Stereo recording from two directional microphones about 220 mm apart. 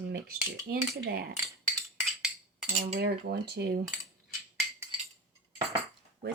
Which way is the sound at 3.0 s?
45° right (ahead or behind).